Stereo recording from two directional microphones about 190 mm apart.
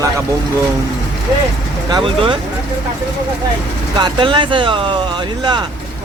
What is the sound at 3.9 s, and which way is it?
Speech, 25° right (ahead or behind).